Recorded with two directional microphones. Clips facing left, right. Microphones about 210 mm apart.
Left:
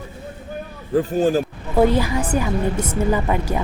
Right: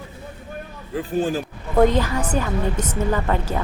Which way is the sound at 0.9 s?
45° left (ahead or behind).